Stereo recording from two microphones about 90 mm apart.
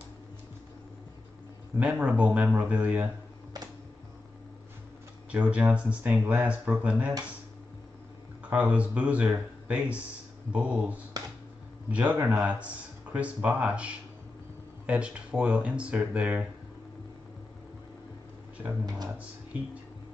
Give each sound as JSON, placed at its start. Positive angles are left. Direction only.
{"t": 1.8, "sound": "speech", "side_deg": -15}
{"t": 5.3, "sound": "speech", "side_deg": -15}
{"t": 8.5, "sound": "speech", "side_deg": -15}
{"t": 19.1, "sound": "speech", "side_deg": -15}